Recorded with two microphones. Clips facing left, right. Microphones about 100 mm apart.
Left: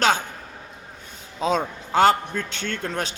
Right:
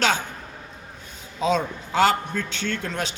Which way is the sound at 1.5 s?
50° left (ahead or behind).